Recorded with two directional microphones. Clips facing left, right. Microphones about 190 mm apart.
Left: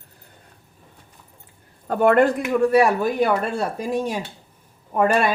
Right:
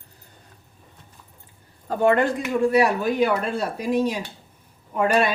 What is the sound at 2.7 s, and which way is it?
A woman's voice, 45° left (ahead or behind).